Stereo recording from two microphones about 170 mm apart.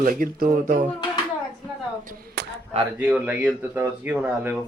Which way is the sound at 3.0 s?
5° right (ahead or behind).